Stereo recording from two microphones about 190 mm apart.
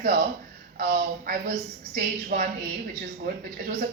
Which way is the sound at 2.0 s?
50° right (ahead or behind).